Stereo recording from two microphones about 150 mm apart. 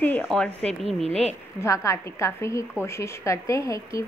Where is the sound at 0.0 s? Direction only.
10° left (ahead or behind).